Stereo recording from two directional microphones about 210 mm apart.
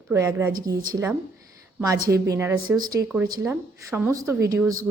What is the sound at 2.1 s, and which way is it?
A woman's voice, 15° right (ahead or behind).